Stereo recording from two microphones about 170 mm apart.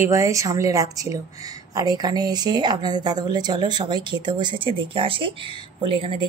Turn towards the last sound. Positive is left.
turn(degrees=-30)  # may be behind; listen again after turning